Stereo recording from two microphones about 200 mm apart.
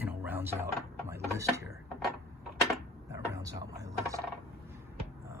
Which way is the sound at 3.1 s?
15° right (ahead or behind).